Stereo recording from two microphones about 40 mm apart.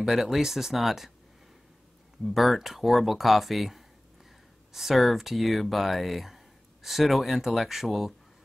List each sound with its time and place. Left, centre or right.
0.0 s speech: centre
2.2 s speech: centre